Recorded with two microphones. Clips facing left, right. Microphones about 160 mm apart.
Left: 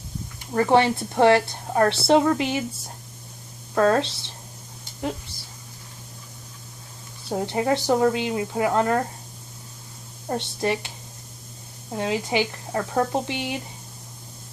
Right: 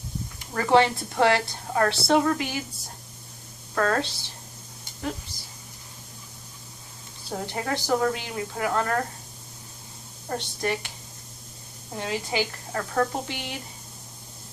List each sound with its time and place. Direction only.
0.5 s speech: 20° left (ahead or behind)
3.8 s speech: 25° left (ahead or behind)
7.3 s speech: 20° left (ahead or behind)
10.2 s speech: 25° left (ahead or behind)
11.9 s speech: 20° left (ahead or behind)